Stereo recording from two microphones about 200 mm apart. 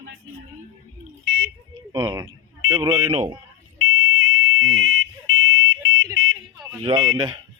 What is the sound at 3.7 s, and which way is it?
Fire alarm, 75° right (ahead or behind).